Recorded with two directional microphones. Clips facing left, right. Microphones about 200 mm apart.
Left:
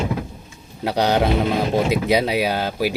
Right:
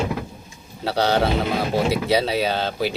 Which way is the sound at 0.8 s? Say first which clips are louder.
Left 1 dB; 15° left (ahead or behind).